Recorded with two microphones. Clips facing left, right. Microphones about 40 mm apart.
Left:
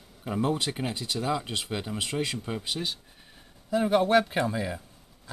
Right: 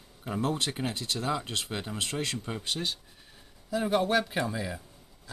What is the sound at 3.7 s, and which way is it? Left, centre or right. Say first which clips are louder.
Speech: left 4 dB; centre.